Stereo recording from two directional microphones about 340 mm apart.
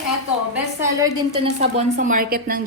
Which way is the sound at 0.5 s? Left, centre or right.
Centre.